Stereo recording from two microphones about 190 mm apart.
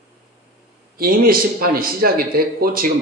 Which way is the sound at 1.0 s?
50° right (ahead or behind).